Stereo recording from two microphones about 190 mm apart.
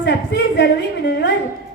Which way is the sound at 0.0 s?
65° left (ahead or behind).